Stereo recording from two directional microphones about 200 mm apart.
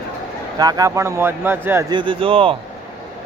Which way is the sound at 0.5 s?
20° right (ahead or behind).